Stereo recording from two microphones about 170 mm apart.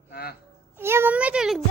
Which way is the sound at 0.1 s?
65° left (ahead or behind).